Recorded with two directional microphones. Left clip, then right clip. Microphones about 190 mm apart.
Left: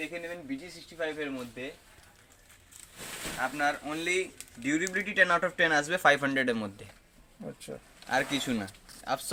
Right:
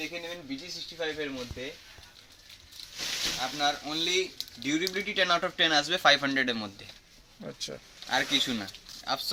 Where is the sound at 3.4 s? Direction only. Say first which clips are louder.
Left 4 dB; centre (ahead or behind).